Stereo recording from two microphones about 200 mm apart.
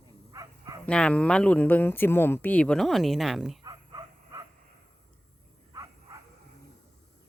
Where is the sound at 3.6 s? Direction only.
20° right (ahead or behind).